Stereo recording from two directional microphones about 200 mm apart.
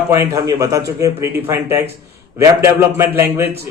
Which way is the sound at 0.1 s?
15° right (ahead or behind).